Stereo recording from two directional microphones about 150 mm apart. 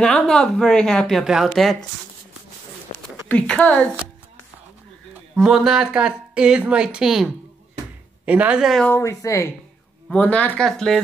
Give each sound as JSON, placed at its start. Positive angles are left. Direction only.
{"t": 0.0, "sound": "speech", "side_deg": 5}
{"t": 3.3, "sound": "speech", "side_deg": 10}
{"t": 5.3, "sound": "speech", "side_deg": -5}
{"t": 8.3, "sound": "a woman's voice", "side_deg": -10}
{"t": 8.8, "sound": "speech", "side_deg": 15}